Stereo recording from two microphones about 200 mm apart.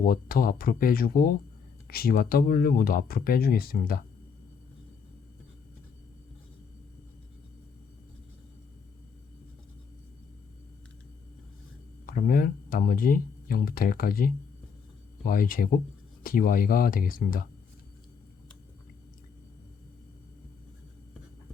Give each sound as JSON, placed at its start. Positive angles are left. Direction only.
{"t": 0.0, "sound": "speech", "side_deg": 45}
{"t": 12.0, "sound": "speech", "side_deg": 45}